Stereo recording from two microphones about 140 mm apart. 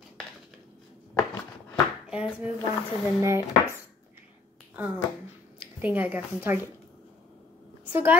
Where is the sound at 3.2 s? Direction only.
20° right (ahead or behind).